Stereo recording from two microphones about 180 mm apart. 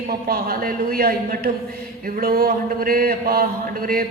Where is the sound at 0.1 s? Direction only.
55° right (ahead or behind).